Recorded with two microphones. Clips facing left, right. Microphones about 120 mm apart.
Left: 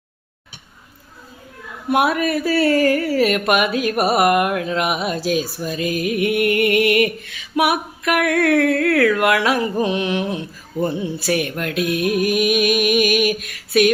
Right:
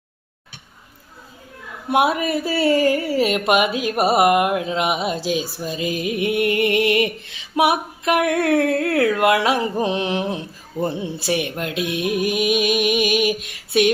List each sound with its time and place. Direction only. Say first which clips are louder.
1.9 s speech: left 1 dB; 20° right (ahead or behind)